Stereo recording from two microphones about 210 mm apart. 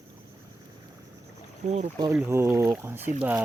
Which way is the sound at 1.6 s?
35° right (ahead or behind).